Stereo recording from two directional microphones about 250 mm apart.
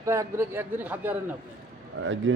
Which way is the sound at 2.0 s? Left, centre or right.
Right.